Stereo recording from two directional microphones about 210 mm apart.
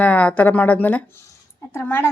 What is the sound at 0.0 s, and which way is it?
A woman's voice, 5° left (ahead or behind).